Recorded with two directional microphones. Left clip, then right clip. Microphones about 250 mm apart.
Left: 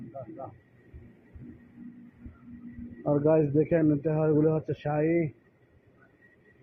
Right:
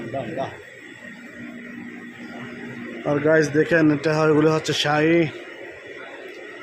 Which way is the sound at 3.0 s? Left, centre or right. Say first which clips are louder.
Right 6 dB; right.